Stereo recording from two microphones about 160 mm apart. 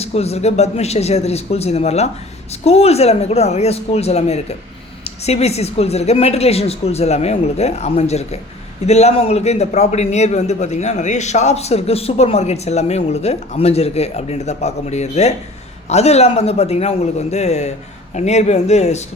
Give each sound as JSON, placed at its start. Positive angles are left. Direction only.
{"t": 0.0, "sound": "a man's voice", "side_deg": 40}